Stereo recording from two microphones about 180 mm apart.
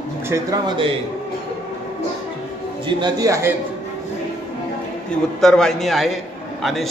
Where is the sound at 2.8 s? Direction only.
20° right (ahead or behind).